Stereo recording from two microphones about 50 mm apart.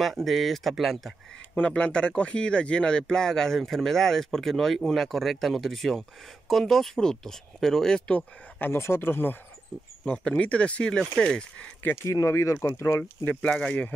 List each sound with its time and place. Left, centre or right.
0.0 s speech: centre
1.7 s speech: centre
8.7 s speech: left
10.0 s speech: centre
11.9 s speech: left
12.7 s speech: left
13.5 s speech: centre